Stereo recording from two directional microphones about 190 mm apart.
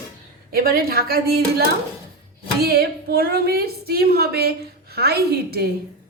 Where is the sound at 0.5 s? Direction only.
50° right (ahead or behind).